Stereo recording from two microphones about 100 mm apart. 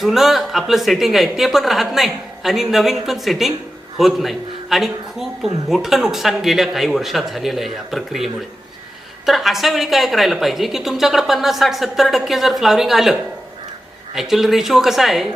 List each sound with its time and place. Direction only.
0.0 s a man's voice: centre (ahead or behind)
14.2 s a man's voice: 5° right (ahead or behind)